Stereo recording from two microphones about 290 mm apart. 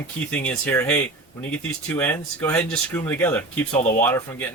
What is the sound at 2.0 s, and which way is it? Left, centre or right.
Speech, centre.